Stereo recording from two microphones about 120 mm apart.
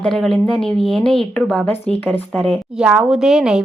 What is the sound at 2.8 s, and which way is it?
Speech, 5° right (ahead or behind).